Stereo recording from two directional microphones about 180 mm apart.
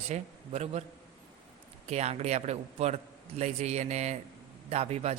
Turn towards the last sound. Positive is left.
turn(degrees=-35)  # may be behind; listen again after turning